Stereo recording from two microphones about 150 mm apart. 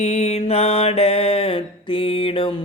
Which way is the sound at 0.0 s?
45° left (ahead or behind).